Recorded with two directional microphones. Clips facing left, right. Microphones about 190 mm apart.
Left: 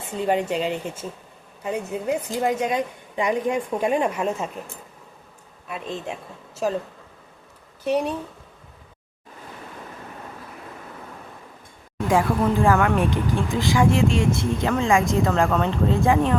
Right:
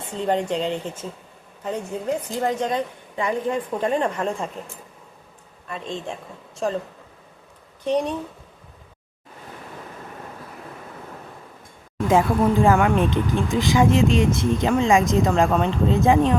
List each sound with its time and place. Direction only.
0.1 s a woman's voice: 10° left (ahead or behind)
5.6 s a woman's voice: 5° left (ahead or behind)
7.9 s a woman's voice: 5° left (ahead or behind)
12.0 s speech: 20° right (ahead or behind)